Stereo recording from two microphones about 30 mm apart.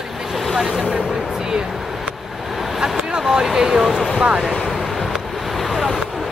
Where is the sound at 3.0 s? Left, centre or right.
Right.